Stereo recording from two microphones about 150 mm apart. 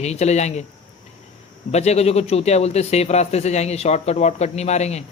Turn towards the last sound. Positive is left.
turn(degrees=45)  # may be behind; listen again after turning